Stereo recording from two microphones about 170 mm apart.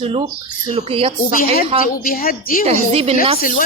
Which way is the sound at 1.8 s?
55° left (ahead or behind).